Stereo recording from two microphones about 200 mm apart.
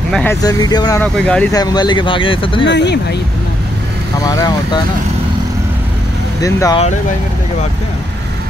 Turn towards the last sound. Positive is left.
turn(degrees=15)  # may be behind; listen again after turning